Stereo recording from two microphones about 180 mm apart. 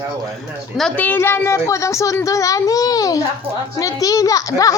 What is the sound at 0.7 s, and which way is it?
A woman's voice, 5° left (ahead or behind).